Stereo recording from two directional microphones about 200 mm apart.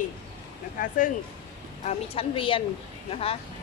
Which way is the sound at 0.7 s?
40° left (ahead or behind).